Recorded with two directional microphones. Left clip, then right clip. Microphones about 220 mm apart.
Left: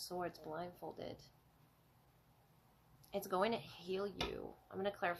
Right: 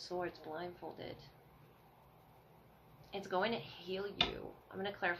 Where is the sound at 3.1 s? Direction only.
50° left (ahead or behind).